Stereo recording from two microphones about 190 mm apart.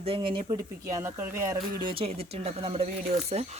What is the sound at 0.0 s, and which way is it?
A woman's voice, 30° right (ahead or behind).